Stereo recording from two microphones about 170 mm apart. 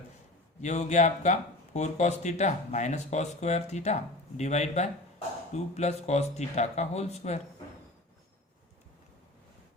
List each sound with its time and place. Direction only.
0.6 s speech: 45° left (ahead or behind)